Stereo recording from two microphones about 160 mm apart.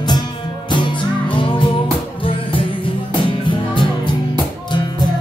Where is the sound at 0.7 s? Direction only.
30° left (ahead or behind).